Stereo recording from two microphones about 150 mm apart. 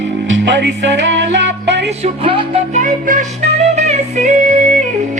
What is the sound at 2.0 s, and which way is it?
Music, 40° right (ahead or behind).